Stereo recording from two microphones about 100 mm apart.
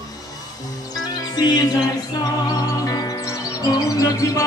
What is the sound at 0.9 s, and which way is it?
Music, 40° left (ahead or behind).